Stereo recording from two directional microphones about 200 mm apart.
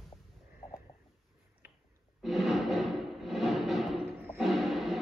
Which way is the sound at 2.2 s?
Centre (ahead or behind).